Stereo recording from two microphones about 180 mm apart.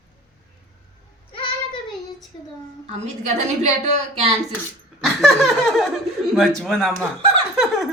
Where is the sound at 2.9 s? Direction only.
40° right (ahead or behind).